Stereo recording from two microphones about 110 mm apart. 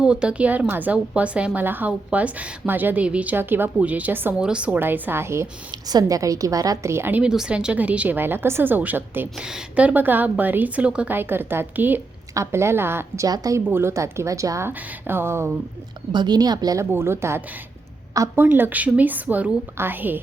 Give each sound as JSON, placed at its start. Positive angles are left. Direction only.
{"t": 0.0, "sound": "a woman's voice", "side_deg": -10}
{"t": 5.7, "sound": "a woman's voice", "side_deg": -35}
{"t": 7.2, "sound": "a woman's voice", "side_deg": -5}
{"t": 9.4, "sound": "a woman's voice", "side_deg": -5}
{"t": 13.2, "sound": "a woman's voice", "side_deg": -35}
{"t": 13.7, "sound": "a woman's voice", "side_deg": -20}
{"t": 16.1, "sound": "a woman's voice", "side_deg": -40}
{"t": 16.9, "sound": "a woman's voice", "side_deg": -25}